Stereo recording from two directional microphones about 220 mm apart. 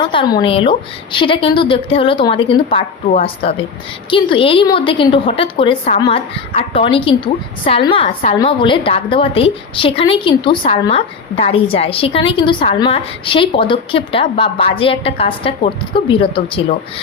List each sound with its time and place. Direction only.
0.0 s a woman's voice: 20° left (ahead or behind)
4.1 s a woman's voice: 25° left (ahead or behind)